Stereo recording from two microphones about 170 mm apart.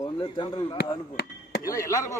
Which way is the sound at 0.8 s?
75° left (ahead or behind).